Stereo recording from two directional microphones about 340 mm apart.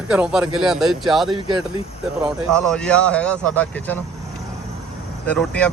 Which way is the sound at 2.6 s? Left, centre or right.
Centre.